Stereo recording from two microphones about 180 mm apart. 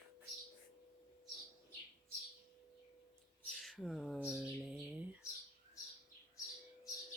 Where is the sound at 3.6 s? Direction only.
Centre (ahead or behind).